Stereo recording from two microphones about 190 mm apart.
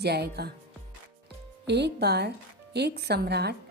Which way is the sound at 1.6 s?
60° right (ahead or behind).